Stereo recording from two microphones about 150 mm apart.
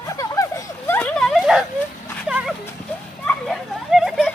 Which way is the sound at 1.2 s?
Centre (ahead or behind).